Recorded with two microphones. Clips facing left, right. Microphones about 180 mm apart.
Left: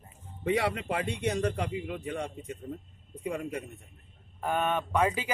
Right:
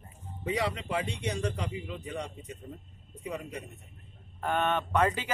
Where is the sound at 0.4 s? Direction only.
55° left (ahead or behind).